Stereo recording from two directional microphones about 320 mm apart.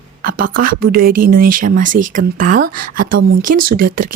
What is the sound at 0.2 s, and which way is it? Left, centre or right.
Speech, right.